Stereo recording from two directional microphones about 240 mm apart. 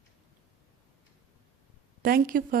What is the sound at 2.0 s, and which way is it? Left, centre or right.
Speech, right.